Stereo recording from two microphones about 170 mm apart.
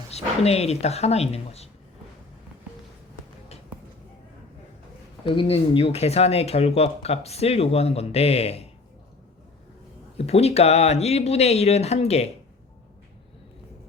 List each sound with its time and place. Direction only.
0.1 s speech: 40° left (ahead or behind)
5.2 s speech: 30° left (ahead or behind)
10.2 s speech: 35° left (ahead or behind)